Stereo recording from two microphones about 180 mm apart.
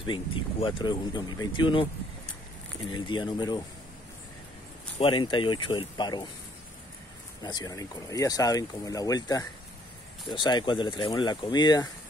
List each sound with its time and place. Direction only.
0.0 s speech: 25° left (ahead or behind)
4.9 s speech: 25° left (ahead or behind)
7.4 s speech: 20° left (ahead or behind)